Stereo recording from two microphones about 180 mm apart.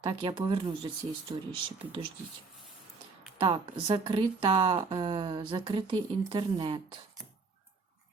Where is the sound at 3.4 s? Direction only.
30° right (ahead or behind).